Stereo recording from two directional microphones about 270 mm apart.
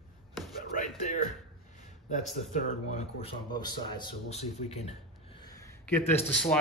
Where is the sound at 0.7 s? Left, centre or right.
Left.